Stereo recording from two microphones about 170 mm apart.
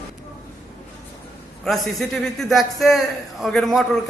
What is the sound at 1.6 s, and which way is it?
A man's voice, centre (ahead or behind).